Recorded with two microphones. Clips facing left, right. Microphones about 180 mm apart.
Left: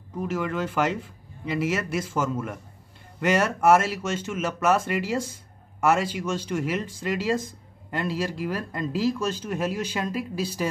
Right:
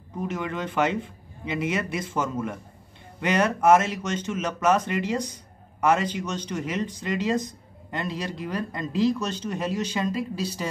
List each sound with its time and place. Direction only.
0.3 s speech: 5° left (ahead or behind)